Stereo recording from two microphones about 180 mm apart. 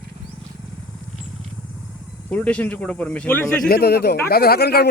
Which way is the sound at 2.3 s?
10° left (ahead or behind).